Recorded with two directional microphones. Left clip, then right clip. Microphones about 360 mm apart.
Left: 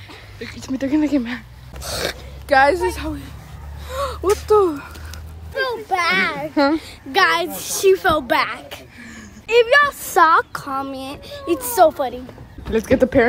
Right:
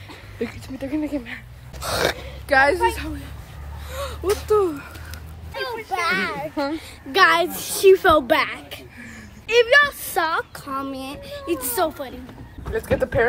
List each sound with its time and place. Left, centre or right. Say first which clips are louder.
0.6 s a child's voice: left 12 dB; left
1.8 s gasp: right 3 dB; centre
2.4 s speech: left 2 dB; centre
3.9 s a sound: left 6 dB; centre
4.5 s a woman's voice: left 4 dB; centre
5.6 s a child's voice: left 5 dB; left
7.1 s a woman's voice: even; centre
10.7 s a woman's voice: left 3 dB; centre